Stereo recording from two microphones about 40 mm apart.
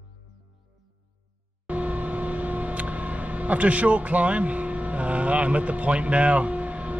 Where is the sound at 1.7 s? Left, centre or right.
Right.